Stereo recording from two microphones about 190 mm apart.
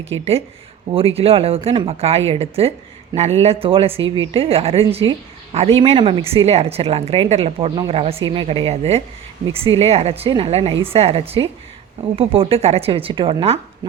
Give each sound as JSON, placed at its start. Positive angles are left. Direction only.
{"t": 0.1, "sound": "a woman's voice", "side_deg": -30}